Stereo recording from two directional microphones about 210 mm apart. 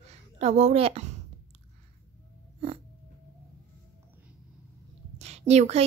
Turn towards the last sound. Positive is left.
turn(degrees=-30)  # may be behind; listen again after turning